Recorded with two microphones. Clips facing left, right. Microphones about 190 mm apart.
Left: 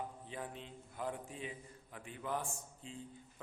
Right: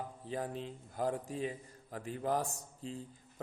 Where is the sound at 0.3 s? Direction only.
40° right (ahead or behind).